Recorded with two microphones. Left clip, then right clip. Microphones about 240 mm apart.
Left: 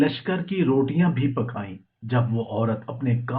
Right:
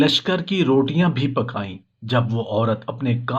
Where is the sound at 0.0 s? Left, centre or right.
Right.